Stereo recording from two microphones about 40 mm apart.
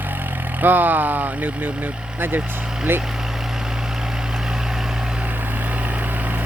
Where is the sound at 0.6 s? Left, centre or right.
Right.